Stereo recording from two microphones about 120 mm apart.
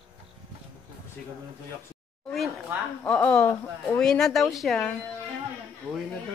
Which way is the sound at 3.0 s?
10° left (ahead or behind).